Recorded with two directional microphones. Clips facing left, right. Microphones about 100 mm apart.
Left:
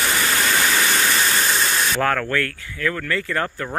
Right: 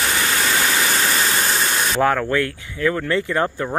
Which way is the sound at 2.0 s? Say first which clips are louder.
Right 5 dB; 15° right (ahead or behind).